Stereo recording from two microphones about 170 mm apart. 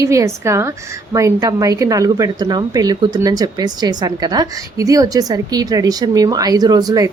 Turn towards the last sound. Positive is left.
turn(degrees=-20)  # may be behind; listen again after turning